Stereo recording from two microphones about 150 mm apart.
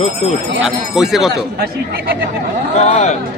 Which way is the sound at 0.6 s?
5° right (ahead or behind).